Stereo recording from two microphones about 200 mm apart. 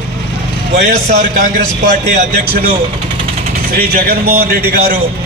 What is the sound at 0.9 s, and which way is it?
Speech, 40° right (ahead or behind).